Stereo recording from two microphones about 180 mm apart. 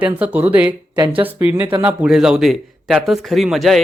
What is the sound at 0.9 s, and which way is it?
Speech, 25° right (ahead or behind).